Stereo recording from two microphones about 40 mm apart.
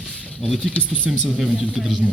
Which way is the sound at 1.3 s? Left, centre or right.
Right.